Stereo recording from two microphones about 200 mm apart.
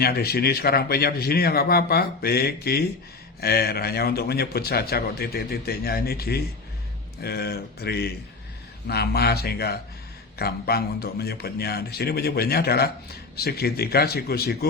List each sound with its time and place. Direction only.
0.0 s a man's voice: 50° left (ahead or behind)